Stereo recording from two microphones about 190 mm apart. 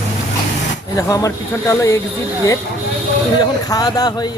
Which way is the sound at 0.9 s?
15° left (ahead or behind).